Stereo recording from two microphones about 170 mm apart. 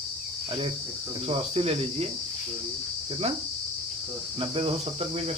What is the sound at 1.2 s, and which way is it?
Cricket, 35° right (ahead or behind).